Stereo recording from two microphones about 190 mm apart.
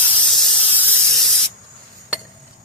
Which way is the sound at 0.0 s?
10° left (ahead or behind).